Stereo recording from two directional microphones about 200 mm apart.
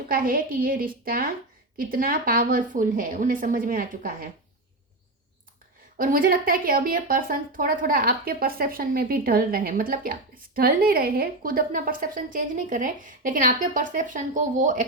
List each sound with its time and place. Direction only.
0.1 s speech: 45° right (ahead or behind)
6.0 s speech: 45° right (ahead or behind)